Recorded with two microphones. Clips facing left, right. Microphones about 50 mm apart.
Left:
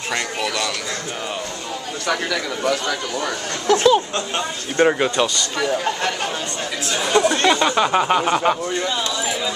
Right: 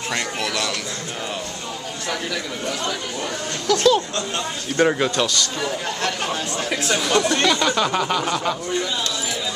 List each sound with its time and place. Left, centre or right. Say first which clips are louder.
0.1 s speech: left 2 dB; centre
3.6 s speech: left 2 dB; left
7.1 s speech: left 4 dB; centre